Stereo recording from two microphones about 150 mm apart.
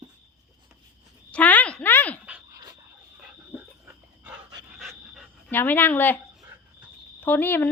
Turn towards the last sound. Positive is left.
turn(degrees=15)  # may be behind; listen again after turning